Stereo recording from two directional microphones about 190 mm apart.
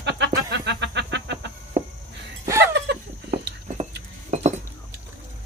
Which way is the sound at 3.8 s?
35° right (ahead or behind).